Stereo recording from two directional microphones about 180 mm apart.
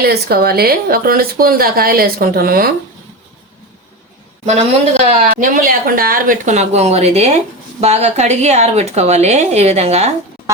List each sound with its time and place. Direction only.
0.0 s speech: 60° right (ahead or behind)
5.0 s speech: 50° right (ahead or behind)